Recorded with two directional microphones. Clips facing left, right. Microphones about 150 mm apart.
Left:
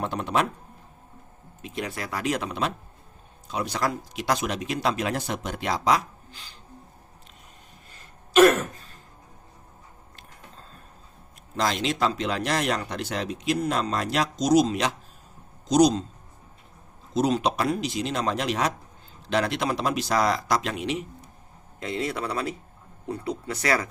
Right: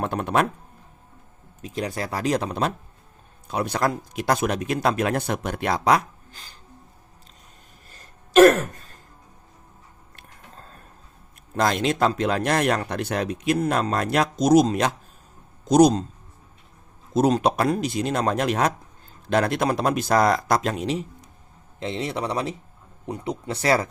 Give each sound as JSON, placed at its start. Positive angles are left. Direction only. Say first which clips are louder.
{"t": 0.0, "sound": "speech", "louder": "right 3 dB", "side_deg": -55}
{"t": 1.6, "sound": "speech", "louder": "right 4 dB", "side_deg": -40}
{"t": 3.4, "sound": "speech", "louder": "right 4 dB", "side_deg": -55}
{"t": 6.3, "sound": "a sound", "louder": "even", "side_deg": -45}
{"t": 8.4, "sound": "throat clearing", "louder": "right 3 dB", "side_deg": -40}
{"t": 11.5, "sound": "speech", "louder": "right 4 dB", "side_deg": -55}
{"t": 17.2, "sound": "speech", "louder": "right 4 dB", "side_deg": -50}
{"t": 21.8, "sound": "speech", "louder": "right 2 dB", "side_deg": -25}